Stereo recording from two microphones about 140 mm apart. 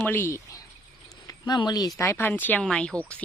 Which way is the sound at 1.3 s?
30° left (ahead or behind).